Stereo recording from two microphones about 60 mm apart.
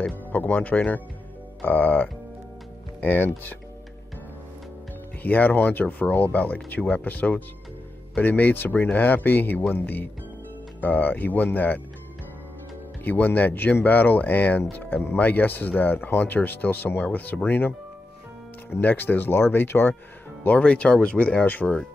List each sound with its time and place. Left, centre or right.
0.3 s speech: left
5.2 s speech: left
13.0 s speech: left
20.5 s speech: centre